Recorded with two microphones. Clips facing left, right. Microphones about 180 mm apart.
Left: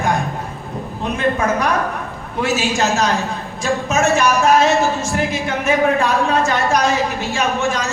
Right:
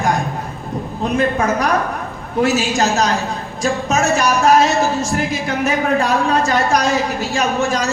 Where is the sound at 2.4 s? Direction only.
40° right (ahead or behind).